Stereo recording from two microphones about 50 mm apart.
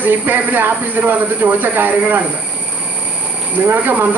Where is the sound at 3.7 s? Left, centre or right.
Right.